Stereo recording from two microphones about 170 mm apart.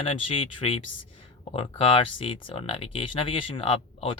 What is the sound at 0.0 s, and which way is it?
Speech, 35° left (ahead or behind).